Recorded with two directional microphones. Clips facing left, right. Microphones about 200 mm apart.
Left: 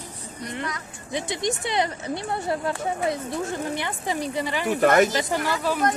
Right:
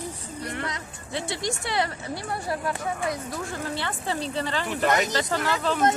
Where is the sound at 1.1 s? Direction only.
15° left (ahead or behind).